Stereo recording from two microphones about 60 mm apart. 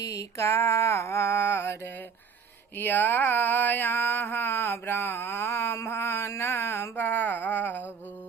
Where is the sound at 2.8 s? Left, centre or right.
Left.